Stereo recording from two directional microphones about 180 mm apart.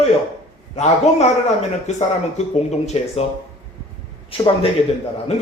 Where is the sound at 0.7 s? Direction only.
40° left (ahead or behind).